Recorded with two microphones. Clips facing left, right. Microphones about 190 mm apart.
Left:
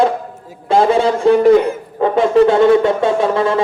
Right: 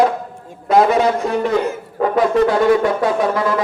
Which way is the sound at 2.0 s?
25° left (ahead or behind).